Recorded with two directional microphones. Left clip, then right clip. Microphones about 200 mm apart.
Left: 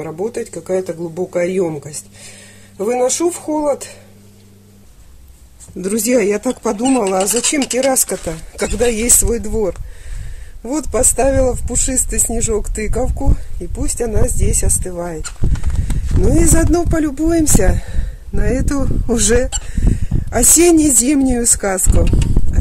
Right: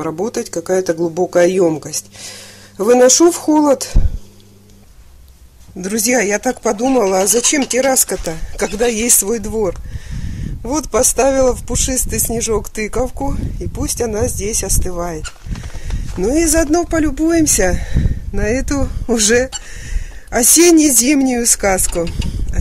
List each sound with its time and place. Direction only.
0.0 s speech: 25° right (ahead or behind)
5.8 s speech: 5° right (ahead or behind)